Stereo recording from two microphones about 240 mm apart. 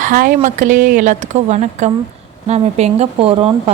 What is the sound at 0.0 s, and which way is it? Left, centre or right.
A woman's voice, right.